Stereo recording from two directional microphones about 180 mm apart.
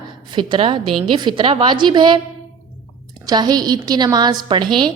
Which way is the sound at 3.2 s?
25° right (ahead or behind).